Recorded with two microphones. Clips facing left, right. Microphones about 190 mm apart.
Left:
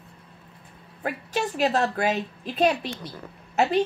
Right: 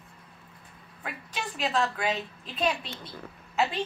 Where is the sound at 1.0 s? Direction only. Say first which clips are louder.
Left 9 dB; 40° left (ahead or behind).